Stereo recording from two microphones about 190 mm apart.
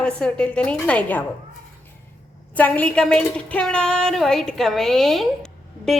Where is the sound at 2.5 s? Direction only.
5° left (ahead or behind).